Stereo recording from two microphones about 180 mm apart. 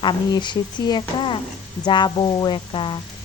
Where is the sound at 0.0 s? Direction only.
25° left (ahead or behind).